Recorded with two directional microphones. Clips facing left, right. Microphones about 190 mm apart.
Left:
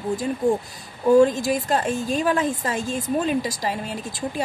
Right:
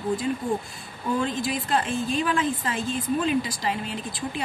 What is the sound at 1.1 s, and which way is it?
Speech, 45° left (ahead or behind).